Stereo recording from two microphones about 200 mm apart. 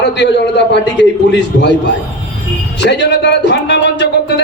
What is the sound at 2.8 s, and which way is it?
A man's voice, 60° left (ahead or behind).